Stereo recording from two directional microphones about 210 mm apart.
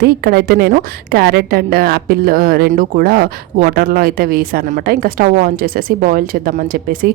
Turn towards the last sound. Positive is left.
turn(degrees=-45)  # may be behind; listen again after turning